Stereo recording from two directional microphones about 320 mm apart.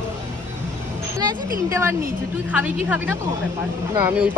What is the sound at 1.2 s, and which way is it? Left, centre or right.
Speech, centre.